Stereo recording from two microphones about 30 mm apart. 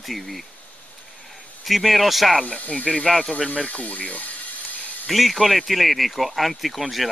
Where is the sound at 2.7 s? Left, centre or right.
Centre.